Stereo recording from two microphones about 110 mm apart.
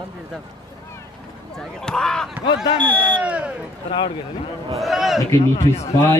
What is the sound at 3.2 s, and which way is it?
Speech, 10° right (ahead or behind).